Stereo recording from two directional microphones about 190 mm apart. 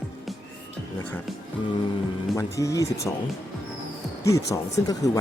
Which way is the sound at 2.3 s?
15° left (ahead or behind).